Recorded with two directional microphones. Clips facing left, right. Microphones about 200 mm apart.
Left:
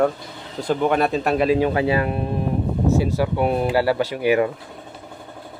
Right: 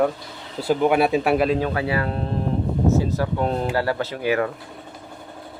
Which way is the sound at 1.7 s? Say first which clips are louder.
Left 4 dB; 20° left (ahead or behind).